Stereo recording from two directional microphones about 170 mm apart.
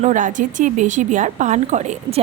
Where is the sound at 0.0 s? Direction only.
45° right (ahead or behind).